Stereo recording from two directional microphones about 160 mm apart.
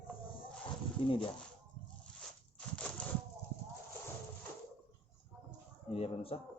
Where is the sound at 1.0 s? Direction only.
35° left (ahead or behind).